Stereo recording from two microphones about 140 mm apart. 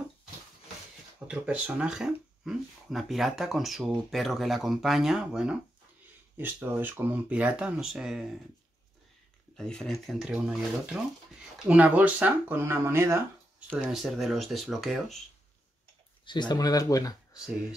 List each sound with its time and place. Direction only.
1.2 s speech: 10° right (ahead or behind)
9.6 s speech: 5° left (ahead or behind); by 13.2 s 20° right (ahead or behind)
13.7 s speech: 5° right (ahead or behind)
16.3 s speech: 30° left (ahead or behind)